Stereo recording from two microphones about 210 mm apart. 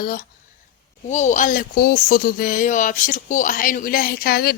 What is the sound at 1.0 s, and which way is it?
Speech, 35° left (ahead or behind).